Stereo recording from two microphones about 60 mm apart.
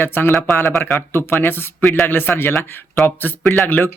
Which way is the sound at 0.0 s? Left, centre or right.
Left.